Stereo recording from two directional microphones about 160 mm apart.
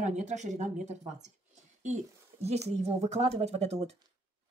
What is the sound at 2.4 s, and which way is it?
A woman's voice, 40° right (ahead or behind).